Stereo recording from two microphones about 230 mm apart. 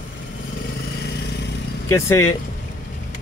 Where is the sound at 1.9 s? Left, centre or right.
Centre.